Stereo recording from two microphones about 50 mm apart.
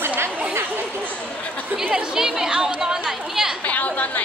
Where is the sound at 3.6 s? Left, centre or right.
Left.